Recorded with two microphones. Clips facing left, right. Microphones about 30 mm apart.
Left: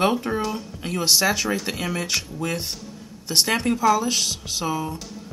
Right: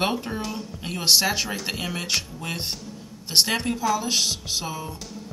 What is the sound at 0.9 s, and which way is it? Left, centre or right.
Speech, centre.